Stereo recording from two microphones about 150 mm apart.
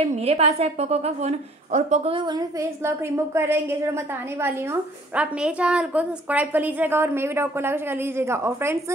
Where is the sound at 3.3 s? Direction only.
15° right (ahead or behind).